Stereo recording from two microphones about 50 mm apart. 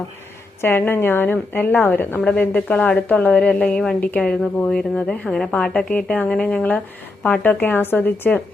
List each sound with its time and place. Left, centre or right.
0.6 s a woman's voice: left
2.2 s a woman's voice: centre
7.4 s a woman's voice: left